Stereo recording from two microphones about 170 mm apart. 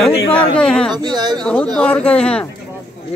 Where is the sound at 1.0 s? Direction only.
25° right (ahead or behind).